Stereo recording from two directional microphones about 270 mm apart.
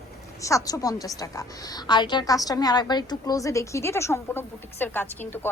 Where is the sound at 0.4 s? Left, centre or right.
Centre.